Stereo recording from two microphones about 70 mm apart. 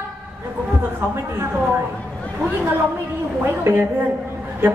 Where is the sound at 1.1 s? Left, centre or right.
Right.